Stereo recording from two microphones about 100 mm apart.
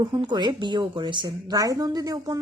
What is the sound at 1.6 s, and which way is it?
Speech, 40° right (ahead or behind).